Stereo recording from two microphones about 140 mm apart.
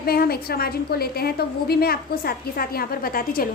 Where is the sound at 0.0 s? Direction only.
90° left.